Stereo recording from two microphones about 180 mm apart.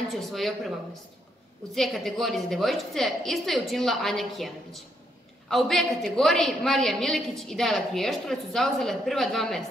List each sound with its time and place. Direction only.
0.1 s a woman's voice: centre (ahead or behind)